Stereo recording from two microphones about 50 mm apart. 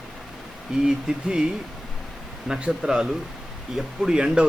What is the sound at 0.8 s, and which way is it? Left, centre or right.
Speech, centre.